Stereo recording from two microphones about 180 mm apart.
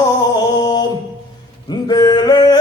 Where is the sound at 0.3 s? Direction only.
20° left (ahead or behind).